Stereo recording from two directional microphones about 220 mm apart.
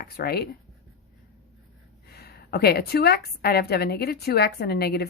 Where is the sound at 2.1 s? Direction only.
45° left (ahead or behind).